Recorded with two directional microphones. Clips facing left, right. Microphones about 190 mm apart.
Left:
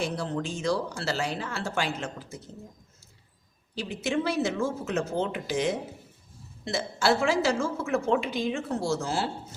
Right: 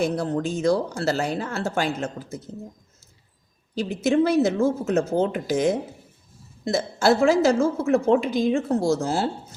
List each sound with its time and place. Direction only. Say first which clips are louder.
0.0 s speech: right 7 dB; 45° right (ahead or behind)
3.8 s speech: right 8 dB; 40° right (ahead or behind)